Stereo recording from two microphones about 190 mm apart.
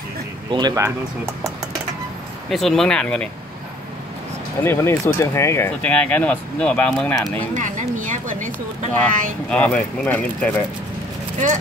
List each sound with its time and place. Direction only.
0.5 s speech: 20° right (ahead or behind)
2.5 s speech: centre (ahead or behind)
4.6 s speech: 15° left (ahead or behind)
7.5 s a woman's voice: 40° right (ahead or behind)
8.9 s speech: 5° left (ahead or behind)